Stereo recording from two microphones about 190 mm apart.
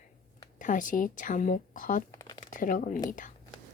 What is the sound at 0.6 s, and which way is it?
Speech, 45° left (ahead or behind).